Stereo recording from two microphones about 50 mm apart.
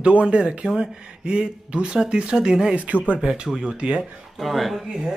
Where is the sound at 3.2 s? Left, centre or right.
Centre.